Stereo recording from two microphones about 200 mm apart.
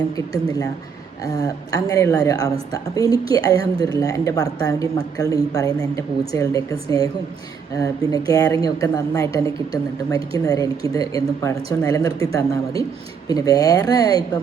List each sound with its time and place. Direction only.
1.2 s a woman's voice: 15° left (ahead or behind)